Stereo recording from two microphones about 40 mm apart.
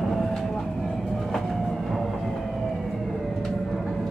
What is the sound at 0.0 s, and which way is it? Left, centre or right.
Train, centre.